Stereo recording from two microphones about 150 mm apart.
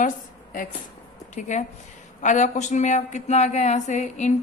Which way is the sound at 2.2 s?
55° left (ahead or behind).